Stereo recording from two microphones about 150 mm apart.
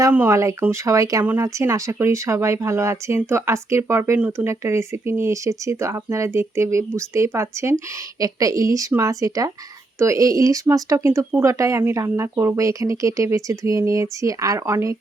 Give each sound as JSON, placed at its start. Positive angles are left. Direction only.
{"t": 0.0, "sound": "speech", "side_deg": -15}